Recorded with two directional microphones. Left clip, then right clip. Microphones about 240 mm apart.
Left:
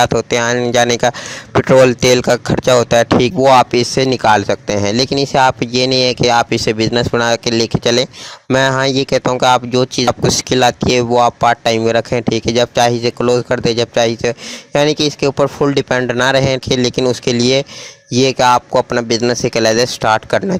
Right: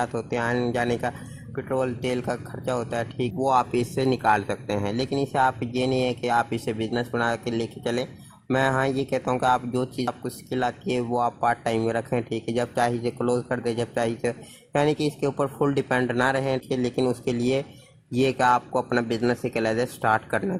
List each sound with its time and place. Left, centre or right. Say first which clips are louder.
0.0 s speech: left 14 dB; left